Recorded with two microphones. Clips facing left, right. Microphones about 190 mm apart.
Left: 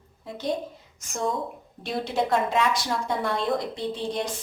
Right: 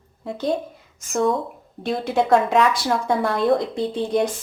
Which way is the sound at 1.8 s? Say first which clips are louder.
Right 5 dB; 55° right (ahead or behind).